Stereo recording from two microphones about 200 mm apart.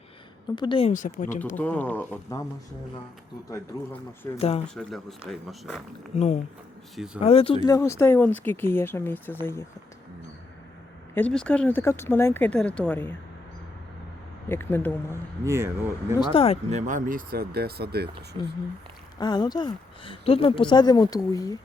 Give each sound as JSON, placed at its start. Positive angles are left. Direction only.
{"t": 0.5, "sound": "speech", "side_deg": 25}
{"t": 1.5, "sound": "speech", "side_deg": 5}
{"t": 3.5, "sound": "speech", "side_deg": 10}
{"t": 4.4, "sound": "speech", "side_deg": 30}
{"t": 4.7, "sound": "speech", "side_deg": 0}
{"t": 6.1, "sound": "speech", "side_deg": 35}
{"t": 6.9, "sound": "speech", "side_deg": 0}
{"t": 7.2, "sound": "speech", "side_deg": 30}
{"t": 11.1, "sound": "speech", "side_deg": 5}
{"t": 14.5, "sound": "speech", "side_deg": 10}
{"t": 15.1, "sound": "speech", "side_deg": -15}
{"t": 16.3, "sound": "speech", "side_deg": 30}
{"t": 16.6, "sound": "speech", "side_deg": -35}
{"t": 19.2, "sound": "speech", "side_deg": 20}